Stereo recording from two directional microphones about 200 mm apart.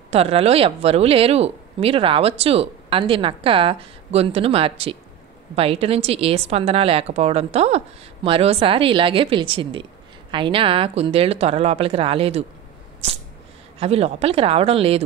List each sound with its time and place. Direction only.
0.1 s a woman's voice: 30° right (ahead or behind)
13.7 s a woman's voice: 30° right (ahead or behind)